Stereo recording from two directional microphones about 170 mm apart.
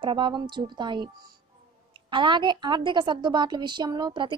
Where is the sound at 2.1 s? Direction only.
25° right (ahead or behind).